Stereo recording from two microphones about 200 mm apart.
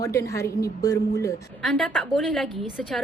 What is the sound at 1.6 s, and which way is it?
A woman's voice, 5° left (ahead or behind).